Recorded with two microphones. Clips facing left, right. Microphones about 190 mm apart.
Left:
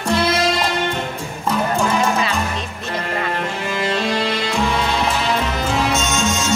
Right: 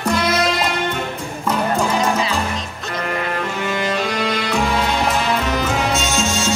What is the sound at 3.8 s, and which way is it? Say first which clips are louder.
Music: left 2 dB; 30° left (ahead or behind).